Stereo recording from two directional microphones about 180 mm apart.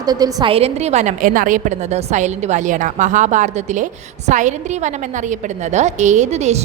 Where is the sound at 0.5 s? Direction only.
35° right (ahead or behind).